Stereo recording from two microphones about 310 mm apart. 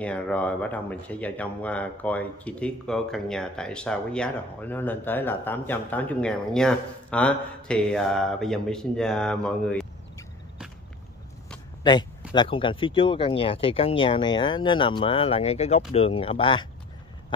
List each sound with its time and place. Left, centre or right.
0.0 s speech: centre
11.8 s a sound: centre
12.4 s speech: centre